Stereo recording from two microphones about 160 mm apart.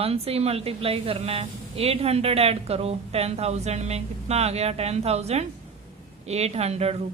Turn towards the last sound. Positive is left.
turn(degrees=-40)  # may be behind; listen again after turning